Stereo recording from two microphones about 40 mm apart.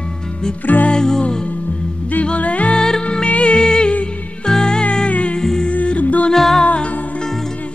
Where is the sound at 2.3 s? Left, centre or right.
Left.